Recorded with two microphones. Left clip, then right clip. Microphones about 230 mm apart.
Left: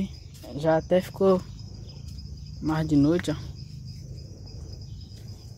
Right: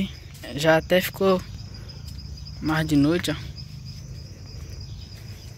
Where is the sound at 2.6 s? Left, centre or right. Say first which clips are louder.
Right 2 dB; centre.